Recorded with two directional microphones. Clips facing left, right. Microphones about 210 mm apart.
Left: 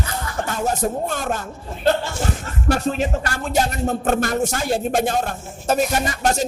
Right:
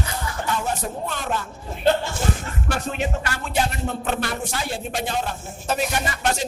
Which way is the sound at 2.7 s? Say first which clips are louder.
Left 6 dB; 40° left (ahead or behind).